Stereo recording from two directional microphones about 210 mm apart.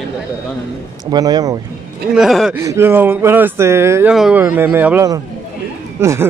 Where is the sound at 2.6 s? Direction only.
15° right (ahead or behind).